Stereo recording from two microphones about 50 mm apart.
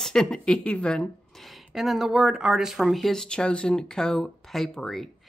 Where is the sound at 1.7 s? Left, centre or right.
Centre.